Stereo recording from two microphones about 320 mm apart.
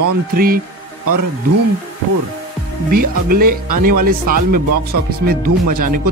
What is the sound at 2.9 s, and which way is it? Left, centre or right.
A man's voice, right.